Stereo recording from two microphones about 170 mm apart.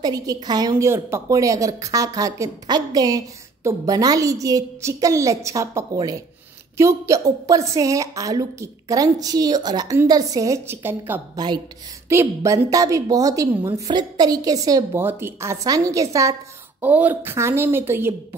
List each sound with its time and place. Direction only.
0.0 s a woman's voice: 20° right (ahead or behind)
11.3 s a woman's voice: 25° right (ahead or behind)